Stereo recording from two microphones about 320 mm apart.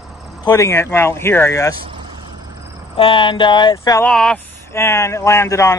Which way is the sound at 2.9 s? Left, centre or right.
Centre.